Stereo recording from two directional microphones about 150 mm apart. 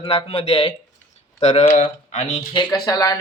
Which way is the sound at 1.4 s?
50° left (ahead or behind).